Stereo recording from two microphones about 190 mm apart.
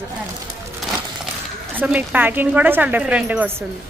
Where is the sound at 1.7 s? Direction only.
10° right (ahead or behind).